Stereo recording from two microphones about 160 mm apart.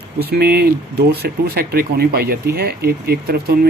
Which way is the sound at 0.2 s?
85° right.